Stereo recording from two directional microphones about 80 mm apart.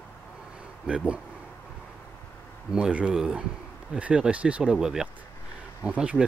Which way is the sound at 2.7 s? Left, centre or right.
Centre.